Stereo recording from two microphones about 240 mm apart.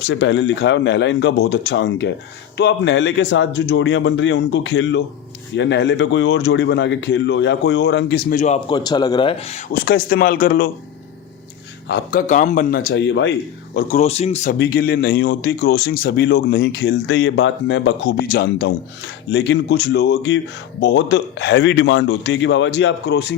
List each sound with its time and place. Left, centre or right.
0.0 s a man's voice: left
11.9 s a man's voice: left
12.2 s speech: left
13.7 s speech: left
14.6 s a man's voice: left